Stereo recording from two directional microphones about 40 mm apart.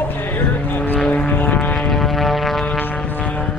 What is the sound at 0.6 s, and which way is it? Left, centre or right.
Vehicle, left.